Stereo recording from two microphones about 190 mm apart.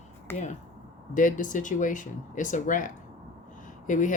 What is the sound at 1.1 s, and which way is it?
Speech, 45° left (ahead or behind).